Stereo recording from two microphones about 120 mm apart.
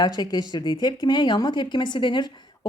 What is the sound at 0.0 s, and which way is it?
Speech, 35° left (ahead or behind).